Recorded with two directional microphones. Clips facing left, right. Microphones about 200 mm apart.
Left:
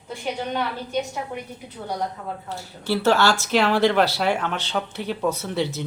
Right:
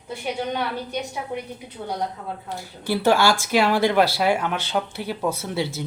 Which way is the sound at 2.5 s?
15° right (ahead or behind).